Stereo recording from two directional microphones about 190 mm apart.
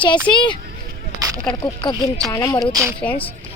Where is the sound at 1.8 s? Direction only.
25° left (ahead or behind).